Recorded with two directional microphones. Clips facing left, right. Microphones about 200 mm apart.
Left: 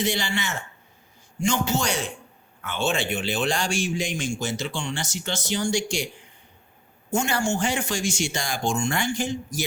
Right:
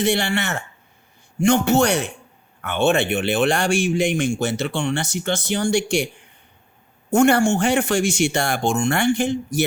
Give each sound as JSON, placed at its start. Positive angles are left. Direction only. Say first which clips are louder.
{"t": 0.0, "sound": "speech", "louder": "right 6 dB", "side_deg": -65}
{"t": 7.1, "sound": "speech", "louder": "right 9 dB", "side_deg": -60}